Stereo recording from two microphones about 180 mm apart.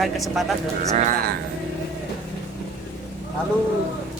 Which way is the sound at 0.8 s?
40° right (ahead or behind).